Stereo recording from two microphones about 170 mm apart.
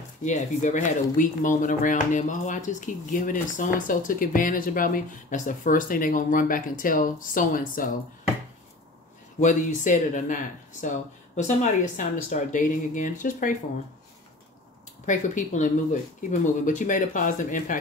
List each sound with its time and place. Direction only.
0.2 s speech: 45° left (ahead or behind)
9.4 s speech: 45° left (ahead or behind)
15.0 s speech: 50° left (ahead or behind)